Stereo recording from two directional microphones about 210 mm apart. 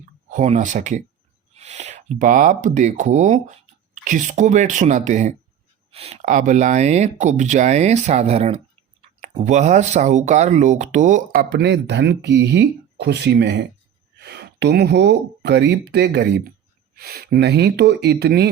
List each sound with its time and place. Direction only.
0.3 s speech: 35° right (ahead or behind); by 18.4 s 50° right (ahead or behind)